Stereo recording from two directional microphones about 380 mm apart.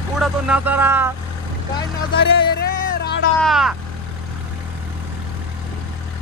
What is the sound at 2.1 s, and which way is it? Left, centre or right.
Music, left.